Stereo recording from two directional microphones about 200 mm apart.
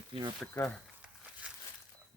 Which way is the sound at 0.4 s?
5° left (ahead or behind).